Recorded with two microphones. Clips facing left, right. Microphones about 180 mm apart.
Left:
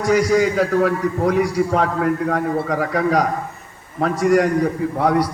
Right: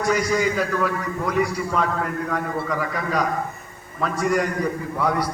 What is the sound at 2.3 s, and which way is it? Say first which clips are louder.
A man's voice: left 5 dB; 60° left (ahead or behind).